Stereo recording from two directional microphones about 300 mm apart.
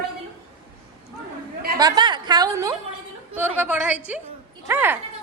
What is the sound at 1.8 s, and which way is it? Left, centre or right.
A woman's voice, centre.